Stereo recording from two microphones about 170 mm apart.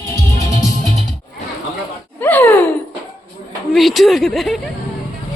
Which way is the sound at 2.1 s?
10° left (ahead or behind).